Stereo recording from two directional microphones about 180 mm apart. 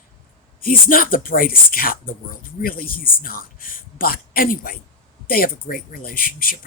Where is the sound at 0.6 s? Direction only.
50° left (ahead or behind).